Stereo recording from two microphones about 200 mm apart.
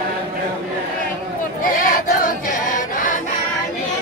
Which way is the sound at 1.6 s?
45° left (ahead or behind).